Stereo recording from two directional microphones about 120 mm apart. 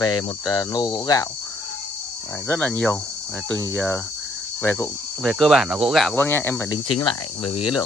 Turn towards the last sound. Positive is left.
turn(degrees=45)  # may be behind; listen again after turning